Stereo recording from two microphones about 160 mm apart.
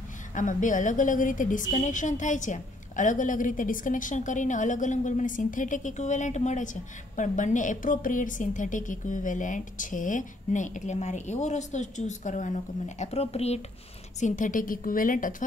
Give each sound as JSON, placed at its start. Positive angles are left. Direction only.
{"t": 0.3, "sound": "a woman's voice", "side_deg": 55}
{"t": 14.2, "sound": "a woman's voice", "side_deg": 55}